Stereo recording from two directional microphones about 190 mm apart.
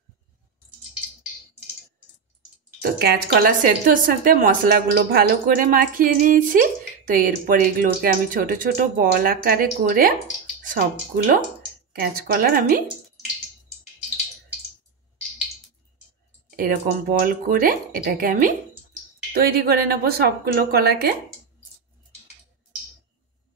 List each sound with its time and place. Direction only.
2.8 s speech: 55° right (ahead or behind)
16.4 s a sound: 50° right (ahead or behind)
17.2 s speech: 50° right (ahead or behind)